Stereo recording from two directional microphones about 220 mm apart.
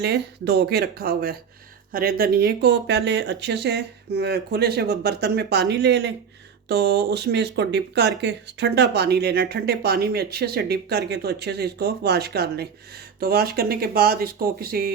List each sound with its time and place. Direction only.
0.0 s speech: 50° right (ahead or behind)